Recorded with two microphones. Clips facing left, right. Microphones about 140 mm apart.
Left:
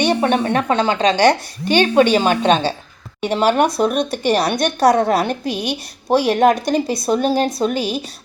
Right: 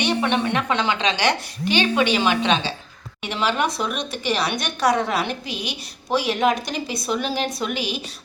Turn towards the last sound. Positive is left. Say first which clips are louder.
# left 8 dB
turn(degrees=45)  # may be behind; listen again after turning